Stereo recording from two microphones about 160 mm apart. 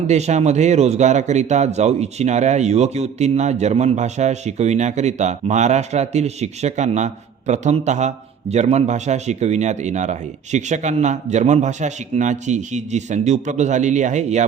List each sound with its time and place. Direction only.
0.1 s speech: 45° right (ahead or behind)